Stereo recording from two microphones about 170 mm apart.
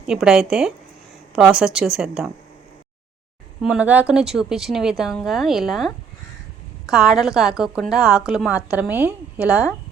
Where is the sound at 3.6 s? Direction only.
5° right (ahead or behind).